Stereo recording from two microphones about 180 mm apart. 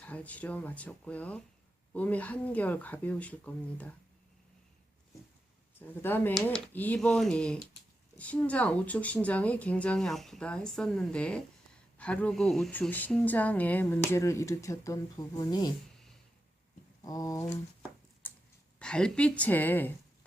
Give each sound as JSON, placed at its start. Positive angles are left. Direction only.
{"t": 0.0, "sound": "speech", "side_deg": 10}
{"t": 6.0, "sound": "speech", "side_deg": 10}
{"t": 17.0, "sound": "speech", "side_deg": 20}
{"t": 18.8, "sound": "speech", "side_deg": 5}